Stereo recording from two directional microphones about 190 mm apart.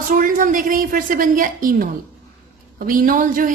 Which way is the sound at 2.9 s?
45° right (ahead or behind).